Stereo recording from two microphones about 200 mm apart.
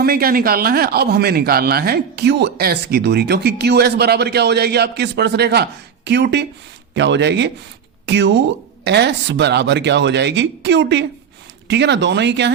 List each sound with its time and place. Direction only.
0.0 s speech: 50° right (ahead or behind)